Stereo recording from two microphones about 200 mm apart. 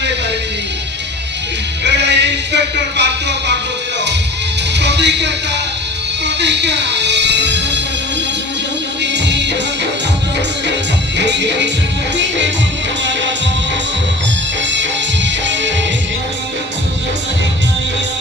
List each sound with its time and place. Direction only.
1.9 s music: 60° right (ahead or behind)
4.7 s music: 60° right (ahead or behind)
9.0 s music: 60° right (ahead or behind)
11.1 s music: 60° right (ahead or behind)